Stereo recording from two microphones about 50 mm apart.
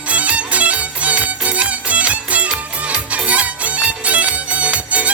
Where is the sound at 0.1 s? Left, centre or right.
Right.